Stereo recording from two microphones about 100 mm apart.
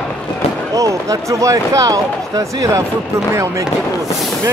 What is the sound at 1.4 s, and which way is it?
Speech, 35° right (ahead or behind).